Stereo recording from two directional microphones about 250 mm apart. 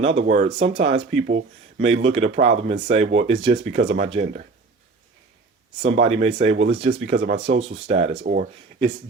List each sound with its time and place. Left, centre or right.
0.0 s speech: right
5.8 s speech: right